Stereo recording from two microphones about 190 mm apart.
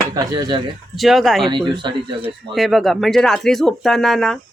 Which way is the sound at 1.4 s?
25° right (ahead or behind).